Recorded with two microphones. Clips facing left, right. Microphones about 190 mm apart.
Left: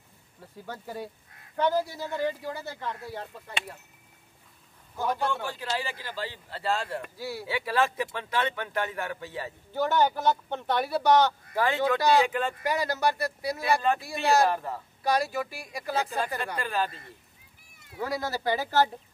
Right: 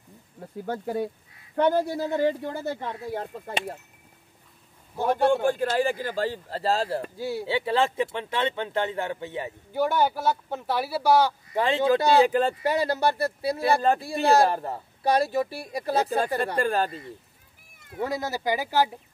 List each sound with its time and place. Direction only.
0.4 s speech: 50° right (ahead or behind)
5.0 s speech: 50° right (ahead or behind); by 11.3 s 10° right (ahead or behind)
11.5 s speech: 25° right (ahead or behind); by 16.9 s 45° right (ahead or behind)
18.0 s speech: 20° right (ahead or behind)